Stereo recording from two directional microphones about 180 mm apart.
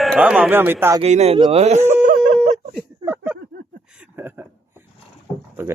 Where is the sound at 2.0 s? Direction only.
45° right (ahead or behind).